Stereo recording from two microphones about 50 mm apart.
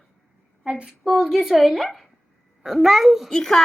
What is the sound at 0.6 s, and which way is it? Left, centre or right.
A woman's voice, centre.